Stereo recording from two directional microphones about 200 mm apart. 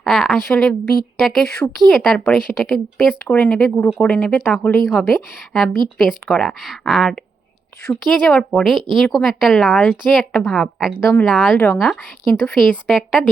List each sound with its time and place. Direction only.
0.0 s speech: centre (ahead or behind)